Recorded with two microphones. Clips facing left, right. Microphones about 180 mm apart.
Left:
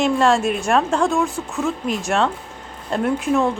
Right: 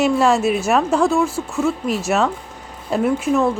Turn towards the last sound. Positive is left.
turn(degrees=0)  # may be behind; listen again after turning